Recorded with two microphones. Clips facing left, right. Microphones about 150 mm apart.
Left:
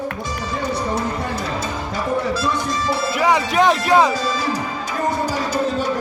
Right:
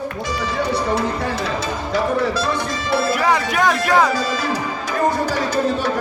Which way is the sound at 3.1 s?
15° left (ahead or behind).